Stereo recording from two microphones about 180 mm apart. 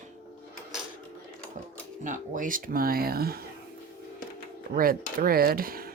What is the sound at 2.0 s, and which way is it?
Speech, 45° right (ahead or behind).